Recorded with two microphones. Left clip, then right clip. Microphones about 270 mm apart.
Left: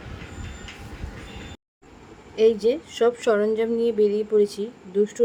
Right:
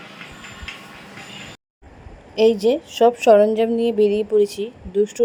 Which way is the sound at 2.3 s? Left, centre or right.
Centre.